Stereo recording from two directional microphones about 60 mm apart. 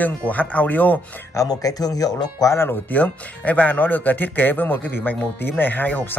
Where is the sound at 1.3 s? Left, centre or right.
Left.